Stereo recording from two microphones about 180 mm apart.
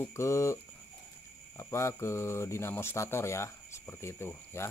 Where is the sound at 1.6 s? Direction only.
15° left (ahead or behind).